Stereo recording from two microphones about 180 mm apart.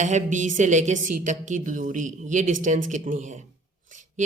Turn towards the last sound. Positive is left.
turn(degrees=-45)  # may be behind; listen again after turning